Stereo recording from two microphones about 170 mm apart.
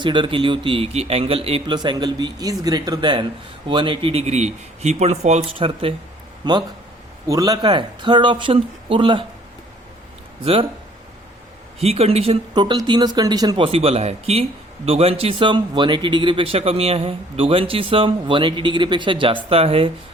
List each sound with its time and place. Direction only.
0.0 s a man's voice: 30° right (ahead or behind)
10.4 s speech: 35° right (ahead or behind)
11.8 s a man's voice: 35° right (ahead or behind)
13.7 s speech: 35° right (ahead or behind)